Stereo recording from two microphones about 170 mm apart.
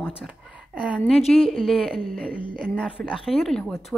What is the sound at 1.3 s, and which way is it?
Speech, centre (ahead or behind).